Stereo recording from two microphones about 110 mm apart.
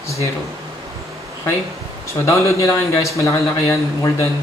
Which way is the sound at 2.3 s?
25° left (ahead or behind).